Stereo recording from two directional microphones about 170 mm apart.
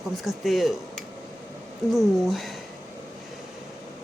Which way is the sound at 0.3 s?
Centre (ahead or behind).